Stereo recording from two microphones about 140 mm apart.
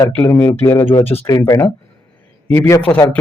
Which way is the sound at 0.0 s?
15° left (ahead or behind).